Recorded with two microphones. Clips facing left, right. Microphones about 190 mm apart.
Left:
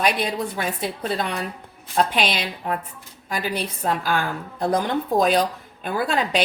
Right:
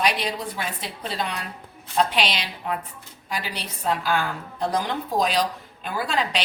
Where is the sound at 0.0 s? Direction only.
50° left (ahead or behind).